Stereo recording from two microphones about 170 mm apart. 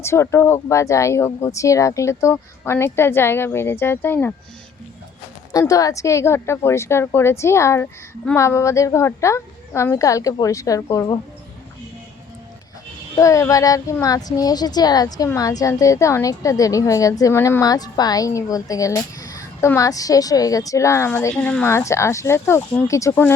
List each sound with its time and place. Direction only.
0.0 s speech: 15° left (ahead or behind)
5.5 s a woman's voice: 20° left (ahead or behind)
13.1 s a woman's voice: 20° left (ahead or behind)